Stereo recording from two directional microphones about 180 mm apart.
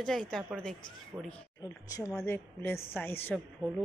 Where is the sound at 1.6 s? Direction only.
20° left (ahead or behind).